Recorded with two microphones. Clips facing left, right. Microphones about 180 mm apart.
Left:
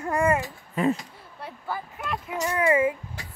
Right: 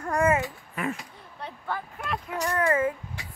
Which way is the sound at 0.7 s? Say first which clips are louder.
Left 9 dB; 35° left (ahead or behind).